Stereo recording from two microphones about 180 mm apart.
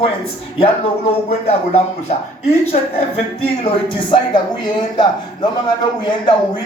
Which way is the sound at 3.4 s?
30° left (ahead or behind).